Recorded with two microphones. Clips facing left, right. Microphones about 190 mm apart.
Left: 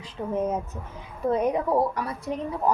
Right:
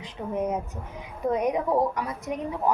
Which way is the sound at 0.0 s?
15° right (ahead or behind).